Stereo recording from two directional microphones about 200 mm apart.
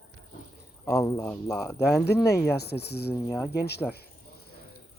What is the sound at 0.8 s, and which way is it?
Speech, 15° left (ahead or behind).